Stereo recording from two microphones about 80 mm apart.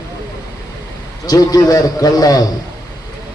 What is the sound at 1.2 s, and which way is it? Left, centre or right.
A man's voice, left.